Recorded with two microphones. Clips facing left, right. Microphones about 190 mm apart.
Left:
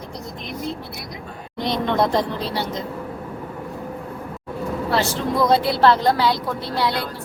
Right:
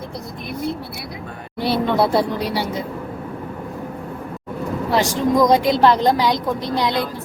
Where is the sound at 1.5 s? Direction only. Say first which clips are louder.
Right 2 dB; 5° right (ahead or behind).